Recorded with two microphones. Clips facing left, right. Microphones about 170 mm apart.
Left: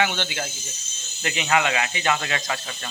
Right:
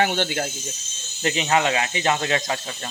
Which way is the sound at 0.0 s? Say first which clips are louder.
Right 3 dB; 40° right (ahead or behind).